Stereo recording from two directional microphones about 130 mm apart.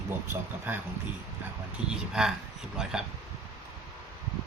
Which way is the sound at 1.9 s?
5° right (ahead or behind).